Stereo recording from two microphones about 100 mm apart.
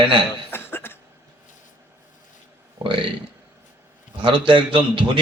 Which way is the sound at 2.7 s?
60° right (ahead or behind).